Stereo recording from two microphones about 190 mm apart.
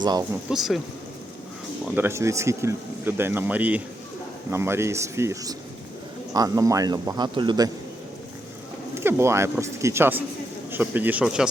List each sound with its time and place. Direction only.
0.0 s a man's voice: 20° right (ahead or behind)
0.5 s speech: centre (ahead or behind)
1.8 s a man's voice: 10° right (ahead or behind)
9.0 s speech: 15° right (ahead or behind)